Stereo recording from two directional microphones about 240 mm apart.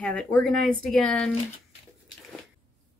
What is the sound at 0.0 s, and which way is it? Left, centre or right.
Speech, centre.